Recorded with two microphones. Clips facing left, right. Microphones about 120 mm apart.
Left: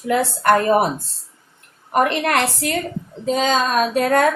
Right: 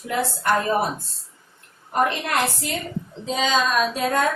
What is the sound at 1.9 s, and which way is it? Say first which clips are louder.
Speech: left 5 dB; 75° left (ahead or behind).